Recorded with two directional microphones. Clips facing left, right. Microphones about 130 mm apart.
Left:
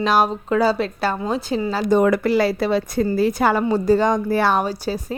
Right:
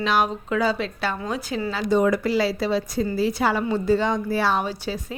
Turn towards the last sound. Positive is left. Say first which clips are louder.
# left 4 dB
turn(degrees=40)  # may be behind; listen again after turning